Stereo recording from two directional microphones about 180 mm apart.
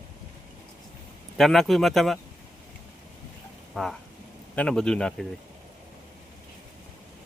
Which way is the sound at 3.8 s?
Centre (ahead or behind).